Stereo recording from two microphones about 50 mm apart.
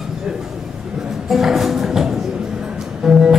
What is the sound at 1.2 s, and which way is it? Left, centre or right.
Music, centre.